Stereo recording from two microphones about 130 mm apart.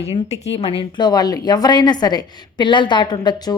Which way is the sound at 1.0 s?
30° left (ahead or behind).